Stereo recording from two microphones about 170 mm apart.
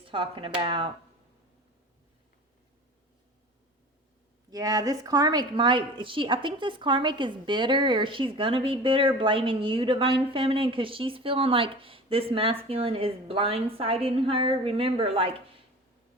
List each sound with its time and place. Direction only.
0.1 s a woman's voice: 30° right (ahead or behind)
4.5 s a woman's voice: 20° right (ahead or behind)